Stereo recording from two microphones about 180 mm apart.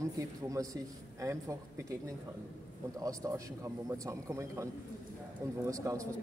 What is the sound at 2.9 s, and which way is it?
Speech, 20° right (ahead or behind).